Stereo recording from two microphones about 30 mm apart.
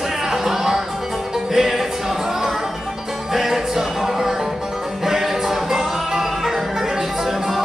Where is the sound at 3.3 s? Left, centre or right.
Centre.